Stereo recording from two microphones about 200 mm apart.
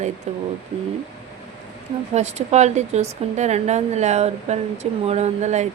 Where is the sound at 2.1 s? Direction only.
35° right (ahead or behind).